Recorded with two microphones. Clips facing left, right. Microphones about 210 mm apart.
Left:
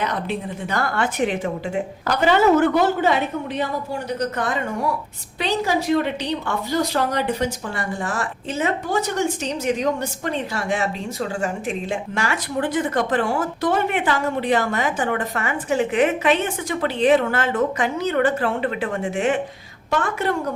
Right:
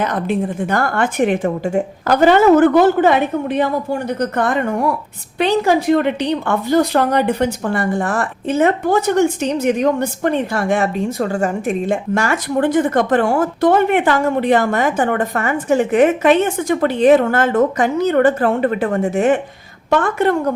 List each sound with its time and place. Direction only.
0.0 s a woman's voice: 50° right (ahead or behind)
19.9 s a woman's voice: 55° right (ahead or behind)